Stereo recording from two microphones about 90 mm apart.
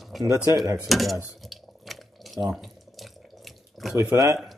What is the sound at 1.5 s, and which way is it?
Water, centre (ahead or behind).